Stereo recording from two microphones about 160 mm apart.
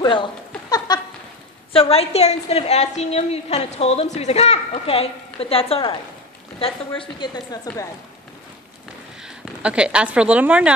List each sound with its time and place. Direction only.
0.0 s a woman's voice: 30° left (ahead or behind)
0.7 s a sound: 25° left (ahead or behind)
1.7 s a woman's voice: 35° left (ahead or behind); by 7.9 s 20° left (ahead or behind)
9.2 s speech: 5° right (ahead or behind)